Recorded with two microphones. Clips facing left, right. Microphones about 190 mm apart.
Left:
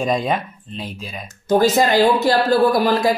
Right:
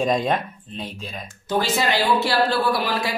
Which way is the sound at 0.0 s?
5° left (ahead or behind).